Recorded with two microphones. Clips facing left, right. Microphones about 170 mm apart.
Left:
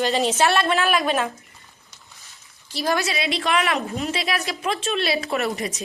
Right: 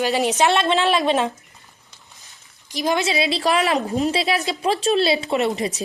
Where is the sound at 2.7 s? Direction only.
20° right (ahead or behind).